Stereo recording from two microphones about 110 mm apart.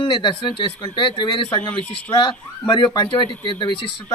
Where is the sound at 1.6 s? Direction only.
15° left (ahead or behind).